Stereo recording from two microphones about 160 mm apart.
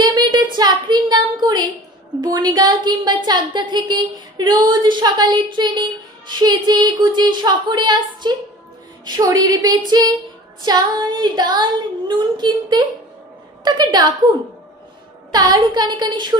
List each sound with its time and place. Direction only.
0.0 s a sound: 25° right (ahead or behind)
2.2 s a woman's voice: 25° right (ahead or behind)
15.3 s a woman's voice: 25° right (ahead or behind)